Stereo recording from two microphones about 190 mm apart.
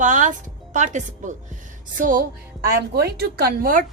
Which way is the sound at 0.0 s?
40° right (ahead or behind).